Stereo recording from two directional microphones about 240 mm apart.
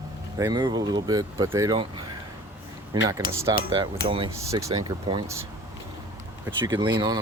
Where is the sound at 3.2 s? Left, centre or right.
Left.